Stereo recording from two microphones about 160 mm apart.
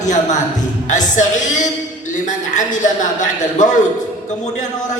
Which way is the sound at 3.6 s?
50° left (ahead or behind).